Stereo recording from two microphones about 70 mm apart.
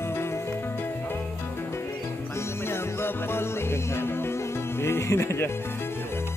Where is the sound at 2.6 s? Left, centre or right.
Left.